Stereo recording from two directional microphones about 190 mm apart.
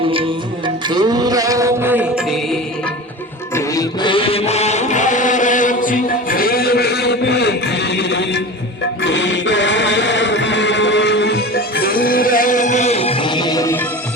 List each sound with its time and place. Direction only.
0.9 s music: 20° right (ahead or behind)
3.5 s chant: 20° left (ahead or behind); by 7.5 s 60° left (ahead or behind)
7.9 s music: 65° left (ahead or behind); by 13.7 s 20° left (ahead or behind)